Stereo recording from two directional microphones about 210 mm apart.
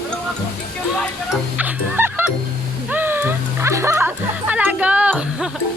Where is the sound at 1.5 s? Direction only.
10° right (ahead or behind).